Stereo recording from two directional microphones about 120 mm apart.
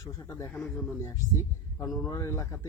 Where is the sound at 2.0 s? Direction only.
25° left (ahead or behind).